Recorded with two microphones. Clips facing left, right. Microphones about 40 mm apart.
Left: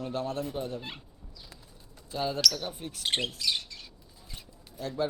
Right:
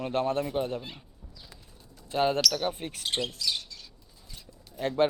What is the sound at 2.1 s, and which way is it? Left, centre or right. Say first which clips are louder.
Speech: right 4 dB; right.